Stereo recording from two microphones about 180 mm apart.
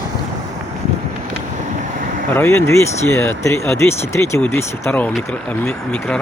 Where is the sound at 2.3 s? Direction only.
15° left (ahead or behind).